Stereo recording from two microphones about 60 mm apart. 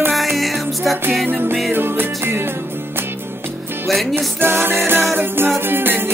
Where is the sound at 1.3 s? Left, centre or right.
Right.